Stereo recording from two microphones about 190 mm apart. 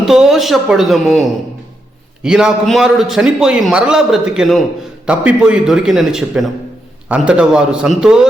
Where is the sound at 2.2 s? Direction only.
5° right (ahead or behind).